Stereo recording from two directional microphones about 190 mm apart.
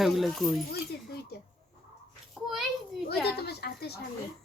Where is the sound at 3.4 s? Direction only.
60° left (ahead or behind).